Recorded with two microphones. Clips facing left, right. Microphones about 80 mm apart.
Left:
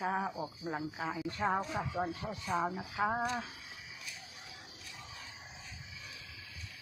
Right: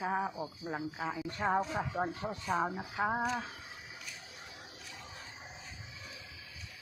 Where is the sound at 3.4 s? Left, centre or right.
Right.